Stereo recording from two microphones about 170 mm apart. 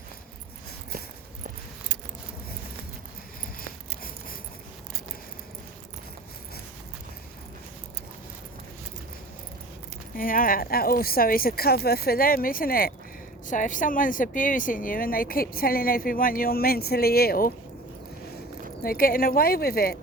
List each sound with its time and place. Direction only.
3.6 s a sound: 60° left (ahead or behind)
10.2 s a woman's voice: 55° left (ahead or behind)
18.8 s a woman's voice: 60° left (ahead or behind)